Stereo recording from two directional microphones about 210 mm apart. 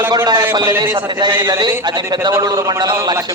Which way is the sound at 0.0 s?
15° right (ahead or behind).